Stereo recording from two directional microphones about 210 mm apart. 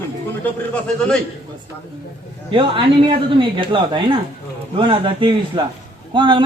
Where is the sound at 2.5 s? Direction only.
25° right (ahead or behind).